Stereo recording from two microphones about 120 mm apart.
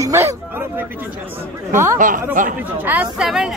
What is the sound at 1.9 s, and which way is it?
Speech, 90° right.